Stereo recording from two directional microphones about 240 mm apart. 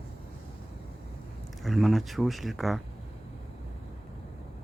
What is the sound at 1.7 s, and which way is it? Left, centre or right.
Speech, centre.